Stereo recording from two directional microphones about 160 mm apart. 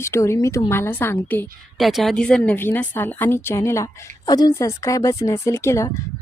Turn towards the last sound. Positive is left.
turn(degrees=20)  # may be behind; listen again after turning